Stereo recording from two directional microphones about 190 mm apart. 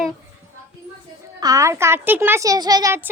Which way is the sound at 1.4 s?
20° right (ahead or behind).